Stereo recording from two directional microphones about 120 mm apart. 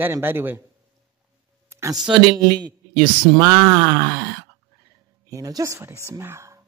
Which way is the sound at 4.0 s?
30° right (ahead or behind).